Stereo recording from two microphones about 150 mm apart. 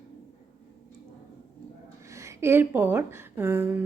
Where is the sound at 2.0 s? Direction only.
20° right (ahead or behind).